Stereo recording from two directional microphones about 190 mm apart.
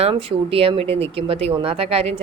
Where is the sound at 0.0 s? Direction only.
30° right (ahead or behind).